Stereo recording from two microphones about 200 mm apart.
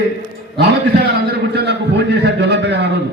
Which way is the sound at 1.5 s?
55° right (ahead or behind).